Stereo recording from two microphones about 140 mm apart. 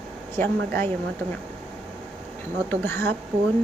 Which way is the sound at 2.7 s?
15° left (ahead or behind).